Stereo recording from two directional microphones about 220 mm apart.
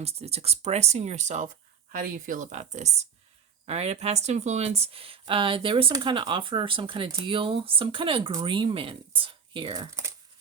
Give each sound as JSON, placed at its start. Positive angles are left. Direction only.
{"t": 0.0, "sound": "speech", "side_deg": -30}